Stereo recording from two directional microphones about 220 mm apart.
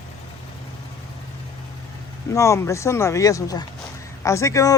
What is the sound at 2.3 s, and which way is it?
Music, 15° left (ahead or behind).